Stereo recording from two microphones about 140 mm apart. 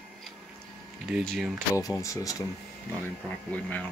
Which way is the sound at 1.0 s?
Centre (ahead or behind).